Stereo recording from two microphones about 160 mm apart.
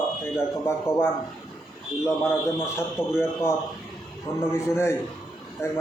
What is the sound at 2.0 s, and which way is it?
A man's voice, 15° left (ahead or behind).